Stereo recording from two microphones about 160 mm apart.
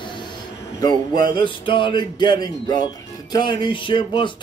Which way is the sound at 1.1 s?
65° right (ahead or behind).